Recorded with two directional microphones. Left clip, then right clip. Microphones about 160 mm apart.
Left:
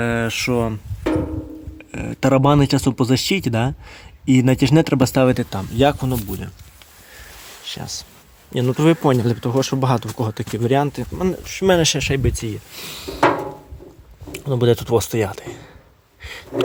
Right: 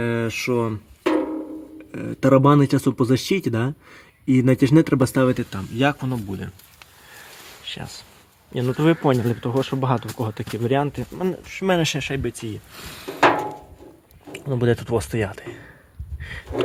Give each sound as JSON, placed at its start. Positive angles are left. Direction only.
{"t": 0.0, "sound": "speech", "side_deg": 10}
{"t": 1.9, "sound": "speech", "side_deg": 10}
{"t": 7.6, "sound": "a sound", "side_deg": 15}
{"t": 8.5, "sound": "speech", "side_deg": 20}
{"t": 14.3, "sound": "speech", "side_deg": 10}
{"t": 16.2, "sound": "a sound", "side_deg": 10}